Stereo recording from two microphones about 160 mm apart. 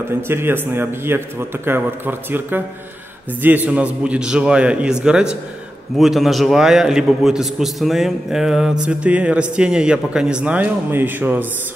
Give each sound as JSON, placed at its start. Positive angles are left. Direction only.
{"t": 0.3, "sound": "a man's voice", "side_deg": -15}